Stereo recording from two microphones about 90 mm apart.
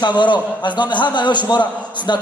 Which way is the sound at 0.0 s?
55° left (ahead or behind).